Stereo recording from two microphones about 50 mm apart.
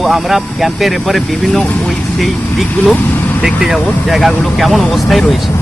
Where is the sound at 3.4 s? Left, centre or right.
Centre.